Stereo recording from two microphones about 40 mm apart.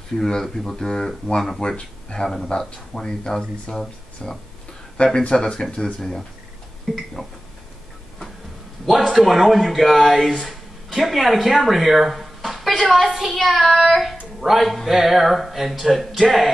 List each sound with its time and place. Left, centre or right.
0.3 s speech: centre
1.6 s speech: left
2.6 s speech: centre
4.9 s speech: left
5.9 s speech: centre
6.9 s speech: centre
8.8 s speech: centre